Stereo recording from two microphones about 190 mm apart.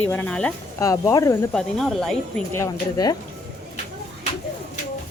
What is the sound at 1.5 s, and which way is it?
Speech, centre (ahead or behind).